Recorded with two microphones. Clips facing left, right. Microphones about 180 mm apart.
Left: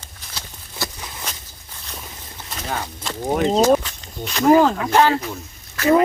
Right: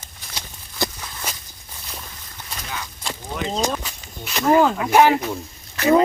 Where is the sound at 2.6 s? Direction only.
55° left (ahead or behind).